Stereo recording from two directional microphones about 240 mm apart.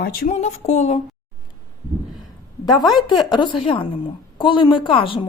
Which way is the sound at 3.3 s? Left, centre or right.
Centre.